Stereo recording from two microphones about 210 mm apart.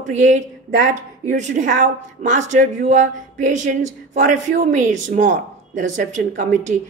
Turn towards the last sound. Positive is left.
turn(degrees=-35)  # may be behind; listen again after turning